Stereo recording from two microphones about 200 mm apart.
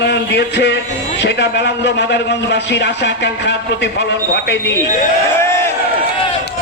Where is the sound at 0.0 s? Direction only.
55° left (ahead or behind).